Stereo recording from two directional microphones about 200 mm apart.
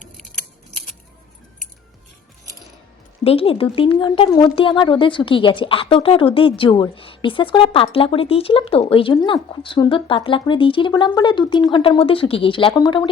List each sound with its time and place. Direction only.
3.2 s speech: 30° left (ahead or behind)